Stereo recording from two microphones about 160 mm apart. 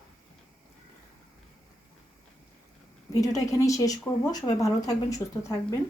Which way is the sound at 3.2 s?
20° left (ahead or behind).